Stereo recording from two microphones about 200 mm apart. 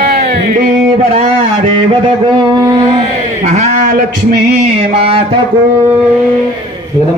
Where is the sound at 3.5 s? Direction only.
35° right (ahead or behind).